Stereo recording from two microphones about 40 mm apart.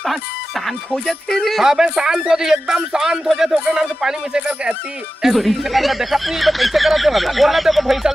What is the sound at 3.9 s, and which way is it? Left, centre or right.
Music, centre.